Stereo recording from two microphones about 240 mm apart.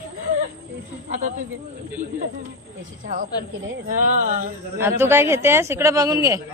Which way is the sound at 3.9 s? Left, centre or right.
Right.